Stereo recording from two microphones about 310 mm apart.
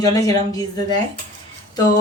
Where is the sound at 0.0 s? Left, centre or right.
Centre.